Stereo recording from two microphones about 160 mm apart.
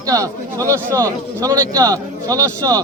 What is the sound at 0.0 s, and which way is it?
Speech, 20° right (ahead or behind).